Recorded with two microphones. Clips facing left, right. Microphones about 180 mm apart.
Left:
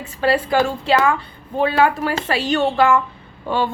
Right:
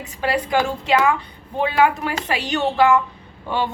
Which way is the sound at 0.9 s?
15° right (ahead or behind).